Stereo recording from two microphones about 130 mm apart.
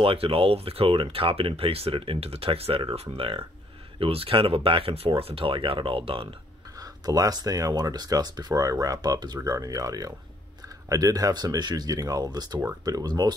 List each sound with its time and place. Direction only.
0.0 s speech: 45° right (ahead or behind)
6.8 s speech: 30° right (ahead or behind)